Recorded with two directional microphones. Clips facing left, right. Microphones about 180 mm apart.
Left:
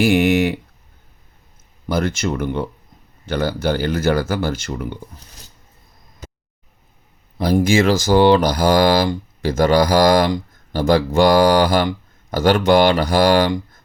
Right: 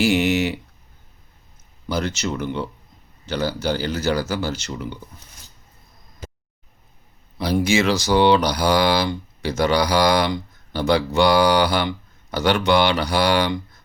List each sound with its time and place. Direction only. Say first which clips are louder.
0.0 s a sound: left 4 dB; 55° left (ahead or behind)
1.9 s speech: left 4 dB; 50° left (ahead or behind)
7.3 s speech: left 4 dB; 50° left (ahead or behind)